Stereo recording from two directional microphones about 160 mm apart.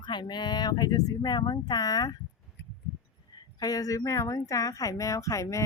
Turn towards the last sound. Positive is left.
turn(degrees=20)  # may be behind; listen again after turning